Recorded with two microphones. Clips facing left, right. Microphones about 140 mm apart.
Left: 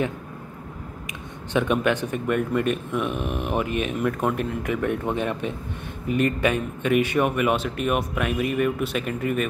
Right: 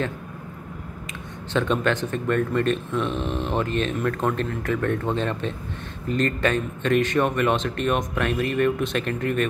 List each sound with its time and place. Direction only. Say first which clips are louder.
1.5 s speech: left 1 dB; 15° left (ahead or behind)